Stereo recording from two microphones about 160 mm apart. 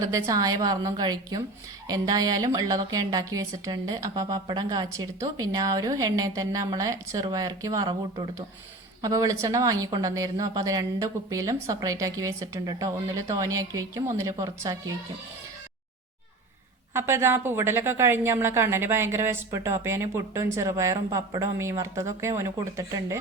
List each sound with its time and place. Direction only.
0.0 s a woman's voice: 20° right (ahead or behind)
16.9 s a woman's voice: 15° right (ahead or behind)